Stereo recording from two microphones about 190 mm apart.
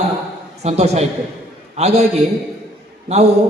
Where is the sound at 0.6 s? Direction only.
35° right (ahead or behind).